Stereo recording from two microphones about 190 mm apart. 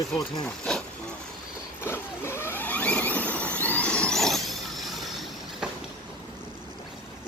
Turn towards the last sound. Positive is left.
turn(degrees=0)  # may be behind; listen again after turning